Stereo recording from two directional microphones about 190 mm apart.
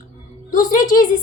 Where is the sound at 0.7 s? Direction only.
45° left (ahead or behind).